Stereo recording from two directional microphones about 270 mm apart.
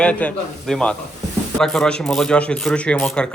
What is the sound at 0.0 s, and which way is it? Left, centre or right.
A man's voice, centre.